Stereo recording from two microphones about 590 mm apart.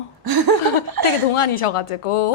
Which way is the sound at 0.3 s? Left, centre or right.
Right.